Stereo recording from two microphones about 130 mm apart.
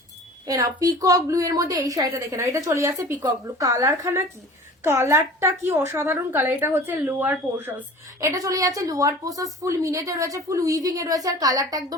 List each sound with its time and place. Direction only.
0.4 s a woman's voice: 25° right (ahead or behind)
8.2 s a woman's voice: 25° right (ahead or behind)